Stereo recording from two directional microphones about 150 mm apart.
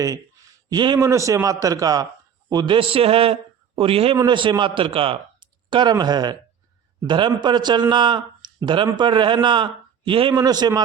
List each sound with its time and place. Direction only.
0.7 s a man's voice: 30° right (ahead or behind)
0.9 s a man's voice: 20° right (ahead or behind)